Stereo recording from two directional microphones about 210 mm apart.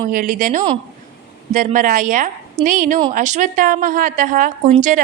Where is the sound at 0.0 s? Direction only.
40° right (ahead or behind).